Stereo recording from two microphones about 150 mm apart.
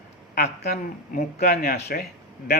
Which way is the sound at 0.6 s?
90° left.